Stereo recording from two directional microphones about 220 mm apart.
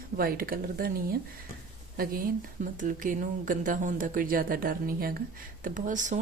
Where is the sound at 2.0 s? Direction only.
40° right (ahead or behind).